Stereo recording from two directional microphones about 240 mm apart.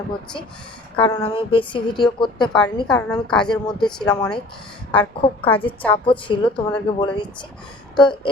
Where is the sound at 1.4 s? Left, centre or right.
Left.